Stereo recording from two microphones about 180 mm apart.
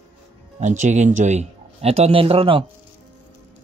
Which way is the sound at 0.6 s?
40° right (ahead or behind).